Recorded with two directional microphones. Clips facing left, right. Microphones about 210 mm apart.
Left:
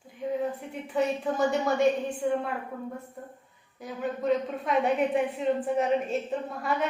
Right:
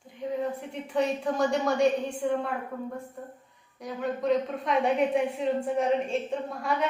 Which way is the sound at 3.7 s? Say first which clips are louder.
Right 1 dB; 5° left (ahead or behind).